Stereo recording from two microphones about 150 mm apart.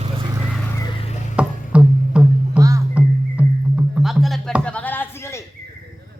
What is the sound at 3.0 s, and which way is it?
Music, 10° right (ahead or behind).